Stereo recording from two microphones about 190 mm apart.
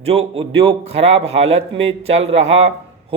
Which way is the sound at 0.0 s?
30° right (ahead or behind).